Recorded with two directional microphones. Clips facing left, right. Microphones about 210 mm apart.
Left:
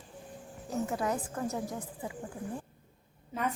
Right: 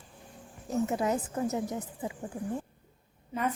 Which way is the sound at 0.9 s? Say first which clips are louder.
Right 3 dB; 20° right (ahead or behind).